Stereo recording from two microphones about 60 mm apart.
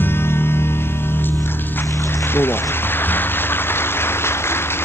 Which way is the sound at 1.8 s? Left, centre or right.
Left.